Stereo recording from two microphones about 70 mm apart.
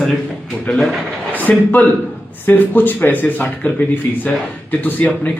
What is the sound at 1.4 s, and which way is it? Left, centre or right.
Speech, left.